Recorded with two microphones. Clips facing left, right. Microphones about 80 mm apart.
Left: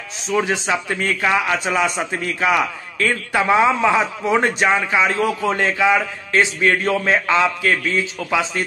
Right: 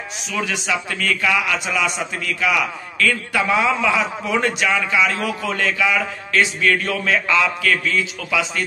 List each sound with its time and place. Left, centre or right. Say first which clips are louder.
0.3 s a man's voice: left 4 dB; left